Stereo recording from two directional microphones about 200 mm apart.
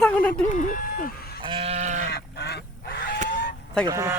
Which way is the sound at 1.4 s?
25° right (ahead or behind).